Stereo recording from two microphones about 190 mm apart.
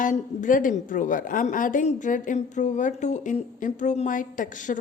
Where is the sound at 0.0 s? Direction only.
45° left (ahead or behind).